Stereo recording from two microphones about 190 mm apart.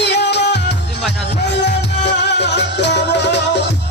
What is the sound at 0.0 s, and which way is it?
Music, 65° left (ahead or behind).